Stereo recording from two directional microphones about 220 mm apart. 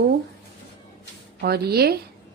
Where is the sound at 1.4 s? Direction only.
45° right (ahead or behind).